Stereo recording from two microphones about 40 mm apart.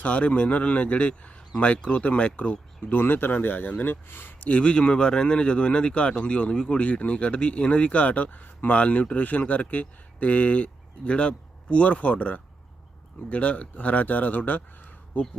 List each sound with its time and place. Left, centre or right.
0.0 s speech: left
2.9 s speech: left
3.8 s speech: left
4.4 s speech: left